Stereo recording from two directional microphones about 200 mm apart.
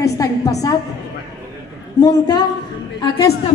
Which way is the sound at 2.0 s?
20° left (ahead or behind).